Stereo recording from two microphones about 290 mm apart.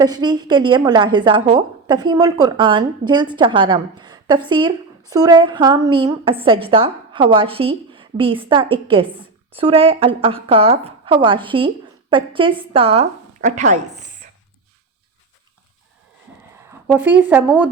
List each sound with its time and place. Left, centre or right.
0.0 s a woman's voice: centre
16.8 s speech: centre